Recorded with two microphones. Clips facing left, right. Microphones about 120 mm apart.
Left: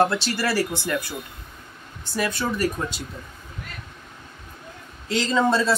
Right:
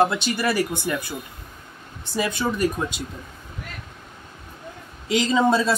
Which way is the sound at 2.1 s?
15° right (ahead or behind).